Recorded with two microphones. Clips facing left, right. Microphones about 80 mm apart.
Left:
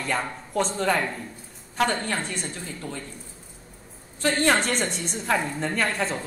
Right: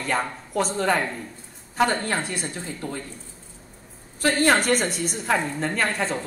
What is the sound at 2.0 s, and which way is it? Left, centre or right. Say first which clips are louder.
Speech: right 2 dB; centre.